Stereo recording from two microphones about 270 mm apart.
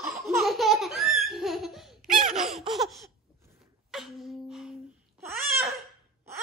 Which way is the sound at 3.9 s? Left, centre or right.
Centre.